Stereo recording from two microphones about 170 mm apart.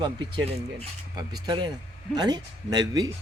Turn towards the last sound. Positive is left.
turn(degrees=-25)  # may be behind; listen again after turning